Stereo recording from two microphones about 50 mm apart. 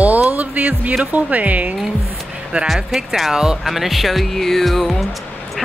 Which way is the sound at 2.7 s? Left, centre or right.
Centre.